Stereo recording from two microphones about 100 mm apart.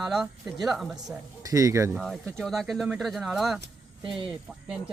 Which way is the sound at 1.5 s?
30° right (ahead or behind).